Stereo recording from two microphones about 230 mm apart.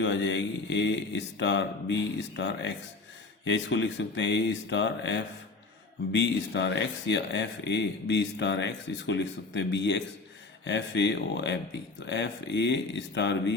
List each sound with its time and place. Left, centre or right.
0.0 s speech: left